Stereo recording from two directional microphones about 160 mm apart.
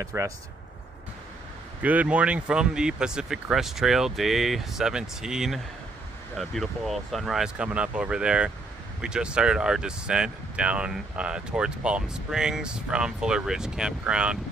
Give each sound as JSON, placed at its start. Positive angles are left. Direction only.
{"t": 0.0, "sound": "speech", "side_deg": -15}
{"t": 1.8, "sound": "speech", "side_deg": -10}